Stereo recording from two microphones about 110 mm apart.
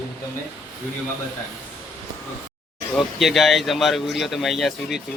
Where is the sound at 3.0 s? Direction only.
Centre (ahead or behind).